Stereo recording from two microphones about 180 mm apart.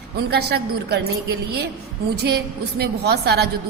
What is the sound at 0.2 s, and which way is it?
Speech, 65° right (ahead or behind).